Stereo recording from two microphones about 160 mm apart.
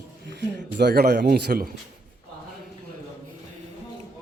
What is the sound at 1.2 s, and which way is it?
Speech, 70° right (ahead or behind).